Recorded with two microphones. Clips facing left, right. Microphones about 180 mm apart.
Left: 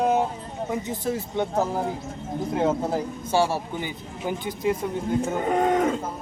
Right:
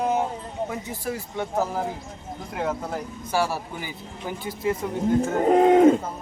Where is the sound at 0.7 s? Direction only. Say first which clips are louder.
Left 3 dB; 20° left (ahead or behind).